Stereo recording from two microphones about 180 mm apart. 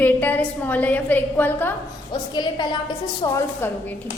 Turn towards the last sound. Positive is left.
turn(degrees=15)  # may be behind; listen again after turning